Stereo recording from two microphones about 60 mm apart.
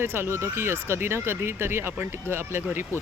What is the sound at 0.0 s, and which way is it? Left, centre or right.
Speech, right.